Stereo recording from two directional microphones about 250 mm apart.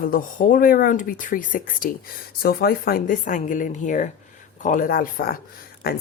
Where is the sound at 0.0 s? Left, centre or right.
Left.